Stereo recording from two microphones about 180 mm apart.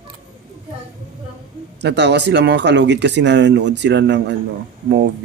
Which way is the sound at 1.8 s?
70° right (ahead or behind).